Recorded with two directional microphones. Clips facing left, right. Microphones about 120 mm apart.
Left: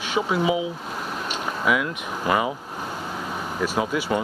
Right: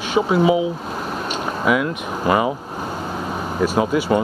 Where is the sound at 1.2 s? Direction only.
35° right (ahead or behind).